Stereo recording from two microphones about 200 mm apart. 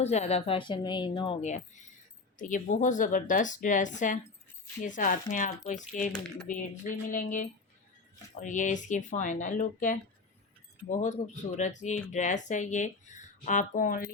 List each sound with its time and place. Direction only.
0.0 s speech: 35° left (ahead or behind)